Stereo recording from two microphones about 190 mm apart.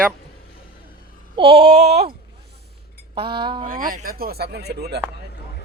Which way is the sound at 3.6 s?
45° right (ahead or behind).